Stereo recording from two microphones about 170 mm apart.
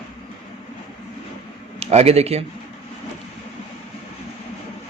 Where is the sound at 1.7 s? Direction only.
40° right (ahead or behind).